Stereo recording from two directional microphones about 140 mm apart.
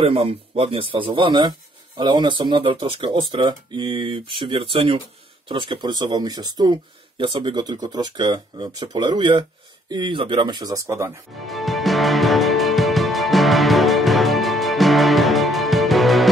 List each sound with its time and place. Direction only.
0.0 s speech: 45° right (ahead or behind); by 11.1 s 20° right (ahead or behind)
11.4 s music: centre (ahead or behind)